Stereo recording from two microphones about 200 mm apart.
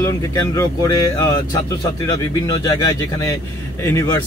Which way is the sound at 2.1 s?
20° left (ahead or behind).